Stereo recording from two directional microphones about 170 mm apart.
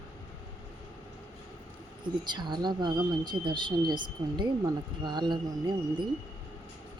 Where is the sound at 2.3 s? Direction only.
25° right (ahead or behind).